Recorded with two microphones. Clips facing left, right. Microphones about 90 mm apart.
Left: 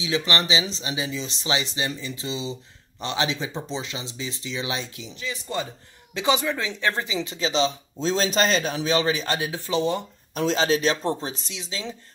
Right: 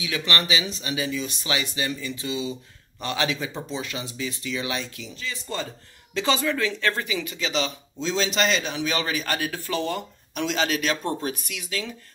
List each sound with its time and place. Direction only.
0.0 s speech: 25° left (ahead or behind)
10.3 s speech: 35° left (ahead or behind)